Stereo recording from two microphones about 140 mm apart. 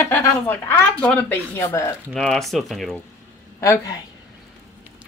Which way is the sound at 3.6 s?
25° left (ahead or behind).